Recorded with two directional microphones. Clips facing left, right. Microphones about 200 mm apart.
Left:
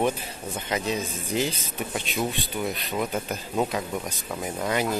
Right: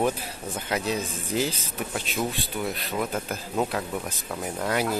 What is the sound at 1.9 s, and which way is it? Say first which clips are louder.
Speech: left 1 dB; centre (ahead or behind).